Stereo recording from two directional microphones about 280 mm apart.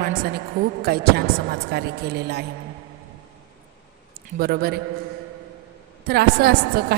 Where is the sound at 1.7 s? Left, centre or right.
Right.